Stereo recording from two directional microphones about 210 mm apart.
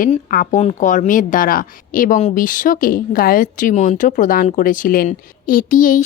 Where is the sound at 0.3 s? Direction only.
35° left (ahead or behind).